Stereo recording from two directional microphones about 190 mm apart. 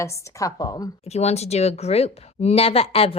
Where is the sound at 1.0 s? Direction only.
35° left (ahead or behind).